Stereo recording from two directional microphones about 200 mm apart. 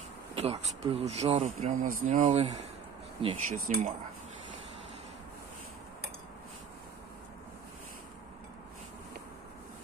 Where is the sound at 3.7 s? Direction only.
35° right (ahead or behind).